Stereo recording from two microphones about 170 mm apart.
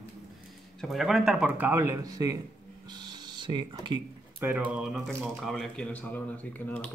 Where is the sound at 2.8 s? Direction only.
25° right (ahead or behind).